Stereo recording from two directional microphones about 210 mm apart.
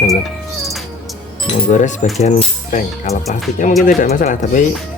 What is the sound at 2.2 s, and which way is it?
Music, 35° left (ahead or behind).